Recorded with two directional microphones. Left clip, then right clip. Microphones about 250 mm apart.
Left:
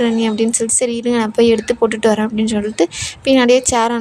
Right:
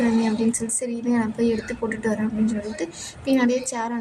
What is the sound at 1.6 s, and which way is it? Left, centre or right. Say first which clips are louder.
A woman's voice: left 12 dB; left.